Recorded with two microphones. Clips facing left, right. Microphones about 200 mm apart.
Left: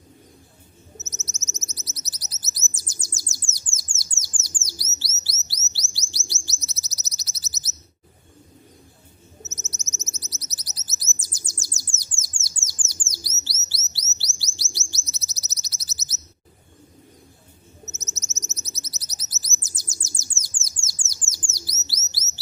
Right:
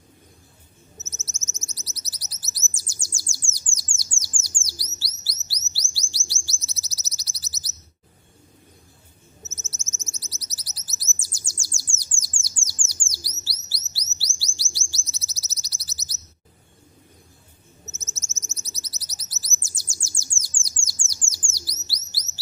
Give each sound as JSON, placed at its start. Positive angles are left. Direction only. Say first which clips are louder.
{"t": 1.0, "sound": "bird", "louder": "left 3 dB", "side_deg": 20}
{"t": 9.5, "sound": "bird", "louder": "left 3 dB", "side_deg": 20}
{"t": 17.9, "sound": "bird", "louder": "left 3 dB", "side_deg": 20}